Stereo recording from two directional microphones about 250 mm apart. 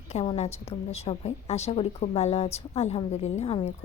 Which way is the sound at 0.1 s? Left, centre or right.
Left.